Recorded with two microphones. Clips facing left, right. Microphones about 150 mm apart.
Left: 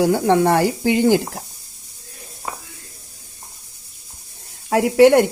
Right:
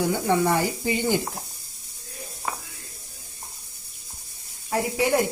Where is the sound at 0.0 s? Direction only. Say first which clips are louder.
Left 7 dB; 75° left (ahead or behind).